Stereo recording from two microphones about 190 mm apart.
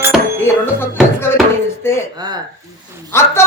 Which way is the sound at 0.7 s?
10° left (ahead or behind).